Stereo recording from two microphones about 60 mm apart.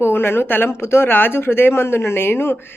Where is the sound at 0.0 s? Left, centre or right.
Left.